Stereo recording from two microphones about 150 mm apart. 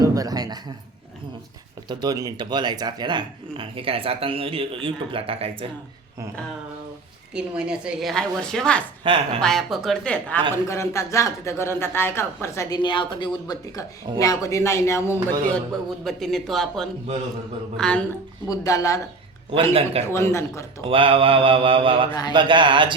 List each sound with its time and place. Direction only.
0.0 s a sound: 25° right (ahead or behind)
1.9 s speech: 25° right (ahead or behind)
7.3 s a woman's voice: 5° right (ahead or behind)
9.0 s speech: 40° right (ahead or behind)
9.4 s a woman's voice: centre (ahead or behind)
10.5 s speech: 20° left (ahead or behind)
12.8 s speech: 35° left (ahead or behind)
16.0 s a woman's voice: centre (ahead or behind)
18.4 s speech: 20° left (ahead or behind)
19.7 s speech: 40° right (ahead or behind)
20.1 s speech: 20° left (ahead or behind)
20.8 s speech: 35° right (ahead or behind)